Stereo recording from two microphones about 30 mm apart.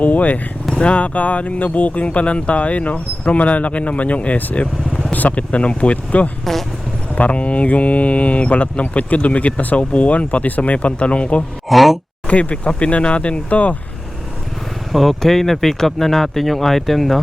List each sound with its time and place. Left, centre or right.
0.0 s speech: left
0.8 s speech: left
6.4 s speech: centre
7.3 s speech: left
9.7 s speech: left
10.6 s speech: left
11.7 s speech: centre
12.3 s speech: left
14.9 s speech: centre